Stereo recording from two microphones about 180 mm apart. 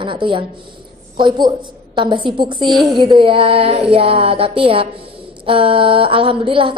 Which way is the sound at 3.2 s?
30° right (ahead or behind).